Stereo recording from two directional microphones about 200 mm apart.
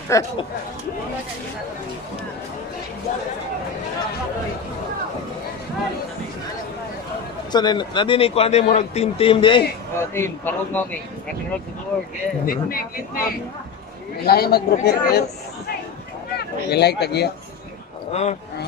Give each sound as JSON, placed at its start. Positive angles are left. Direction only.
{"t": 0.1, "sound": "a man's voice", "side_deg": 15}
{"t": 7.5, "sound": "a man's voice", "side_deg": 20}
{"t": 9.9, "sound": "a man's voice", "side_deg": 10}
{"t": 12.4, "sound": "speech", "side_deg": 45}
{"t": 16.3, "sound": "speech", "side_deg": 55}
{"t": 18.1, "sound": "speech", "side_deg": 35}